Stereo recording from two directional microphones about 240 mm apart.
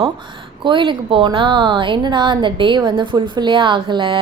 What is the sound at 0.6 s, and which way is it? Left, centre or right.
A woman's voice, centre.